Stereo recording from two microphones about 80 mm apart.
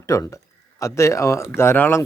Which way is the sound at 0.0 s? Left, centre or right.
Left.